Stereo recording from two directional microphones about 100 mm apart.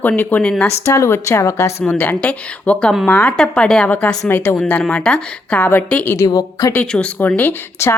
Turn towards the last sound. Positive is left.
turn(degrees=25)  # may be behind; listen again after turning